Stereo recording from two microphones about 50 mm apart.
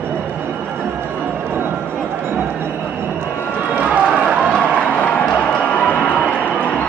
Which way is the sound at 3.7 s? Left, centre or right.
Right.